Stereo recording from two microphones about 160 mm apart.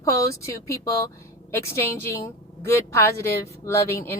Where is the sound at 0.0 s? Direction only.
20° left (ahead or behind).